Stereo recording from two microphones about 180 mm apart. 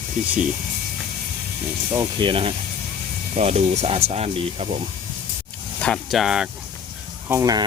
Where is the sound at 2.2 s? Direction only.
30° right (ahead or behind).